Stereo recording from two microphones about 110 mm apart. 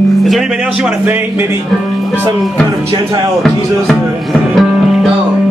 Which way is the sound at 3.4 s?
Centre (ahead or behind).